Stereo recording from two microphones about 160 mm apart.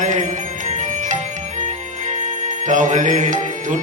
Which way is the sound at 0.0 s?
50° right (ahead or behind).